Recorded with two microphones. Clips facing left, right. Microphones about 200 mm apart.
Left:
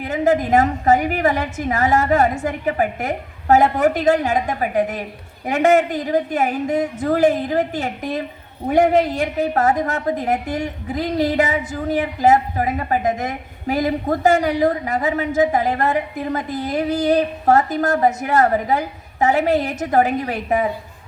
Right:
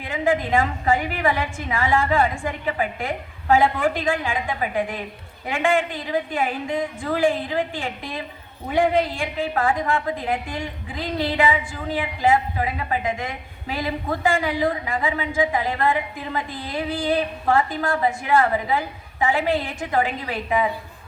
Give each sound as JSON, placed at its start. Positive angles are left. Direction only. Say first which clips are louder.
{"t": 0.0, "sound": "a woman's voice", "louder": "left 4 dB", "side_deg": 40}